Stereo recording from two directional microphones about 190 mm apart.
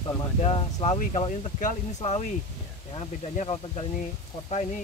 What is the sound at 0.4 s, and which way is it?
Speech, 30° left (ahead or behind).